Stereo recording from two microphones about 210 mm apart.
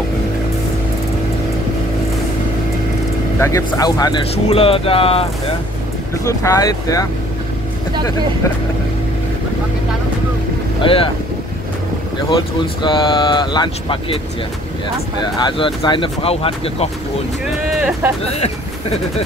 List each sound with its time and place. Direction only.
3.3 s speech: 15° left (ahead or behind)
6.2 s speech: 15° left (ahead or behind)
10.8 s speech: 25° left (ahead or behind)
12.3 s speech: 25° left (ahead or behind)
17.6 s vehicle: 5° right (ahead or behind)
18.3 s a sound: 30° left (ahead or behind)